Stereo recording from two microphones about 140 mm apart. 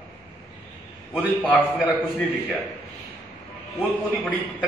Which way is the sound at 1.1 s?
Centre (ahead or behind).